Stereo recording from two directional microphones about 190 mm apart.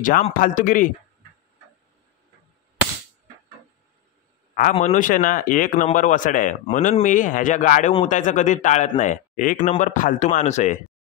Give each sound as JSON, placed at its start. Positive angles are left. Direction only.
{"t": 0.0, "sound": "a man's voice", "side_deg": 45}
{"t": 4.6, "sound": "a man's voice", "side_deg": 40}